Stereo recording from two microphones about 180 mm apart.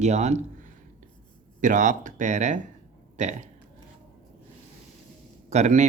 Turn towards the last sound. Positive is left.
turn(degrees=-40)  # may be behind; listen again after turning